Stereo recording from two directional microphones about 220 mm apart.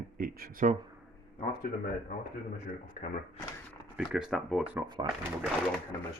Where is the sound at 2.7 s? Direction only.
35° left (ahead or behind).